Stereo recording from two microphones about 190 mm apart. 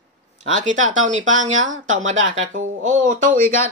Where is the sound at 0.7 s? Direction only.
40° right (ahead or behind).